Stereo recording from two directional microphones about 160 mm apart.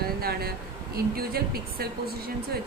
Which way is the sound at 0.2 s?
75° right (ahead or behind).